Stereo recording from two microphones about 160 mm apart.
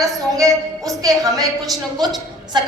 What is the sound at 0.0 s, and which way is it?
A woman's voice, 20° right (ahead or behind).